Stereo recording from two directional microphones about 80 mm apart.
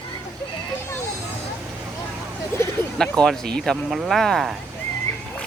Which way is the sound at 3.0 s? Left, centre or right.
Centre.